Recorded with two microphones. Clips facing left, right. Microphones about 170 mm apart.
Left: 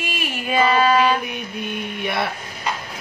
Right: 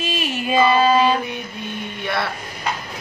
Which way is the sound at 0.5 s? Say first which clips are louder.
Right 1 dB; 25° right (ahead or behind).